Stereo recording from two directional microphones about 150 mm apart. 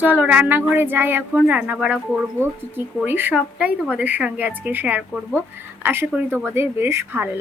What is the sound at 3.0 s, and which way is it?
Speech, 15° right (ahead or behind).